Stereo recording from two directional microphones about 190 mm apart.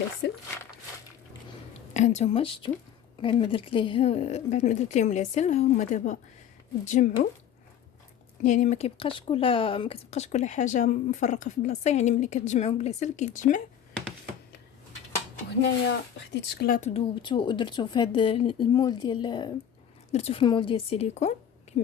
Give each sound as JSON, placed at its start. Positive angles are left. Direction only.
{"t": 0.2, "sound": "speech", "side_deg": 60}
{"t": 1.9, "sound": "speech", "side_deg": 40}
{"t": 8.4, "sound": "speech", "side_deg": 40}
{"t": 16.3, "sound": "speech", "side_deg": 60}
{"t": 16.9, "sound": "speech", "side_deg": 25}